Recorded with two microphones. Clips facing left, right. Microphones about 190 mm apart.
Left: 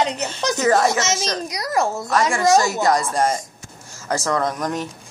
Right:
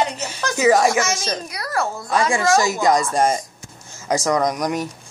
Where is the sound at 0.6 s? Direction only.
10° right (ahead or behind).